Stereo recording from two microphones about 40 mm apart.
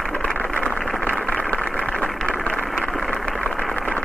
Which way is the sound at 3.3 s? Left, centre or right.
Left.